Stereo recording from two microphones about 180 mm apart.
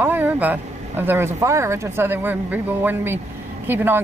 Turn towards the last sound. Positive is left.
turn(degrees=-10)  # may be behind; listen again after turning